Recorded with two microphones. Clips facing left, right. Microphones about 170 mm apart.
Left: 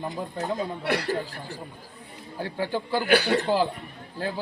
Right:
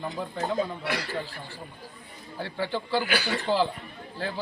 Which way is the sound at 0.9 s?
60° left (ahead or behind).